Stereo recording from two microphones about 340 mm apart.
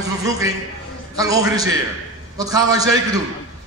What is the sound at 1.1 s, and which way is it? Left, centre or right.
A man's voice, centre.